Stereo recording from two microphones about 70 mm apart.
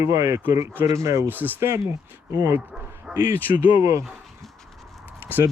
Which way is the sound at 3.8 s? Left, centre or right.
Right.